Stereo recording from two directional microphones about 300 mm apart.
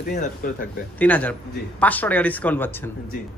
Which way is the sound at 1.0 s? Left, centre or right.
Centre.